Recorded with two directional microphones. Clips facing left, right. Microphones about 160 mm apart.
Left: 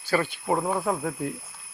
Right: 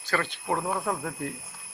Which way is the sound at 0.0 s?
10° left (ahead or behind).